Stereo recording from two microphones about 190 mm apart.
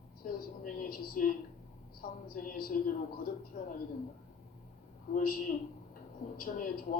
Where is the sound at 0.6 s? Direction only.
50° left (ahead or behind).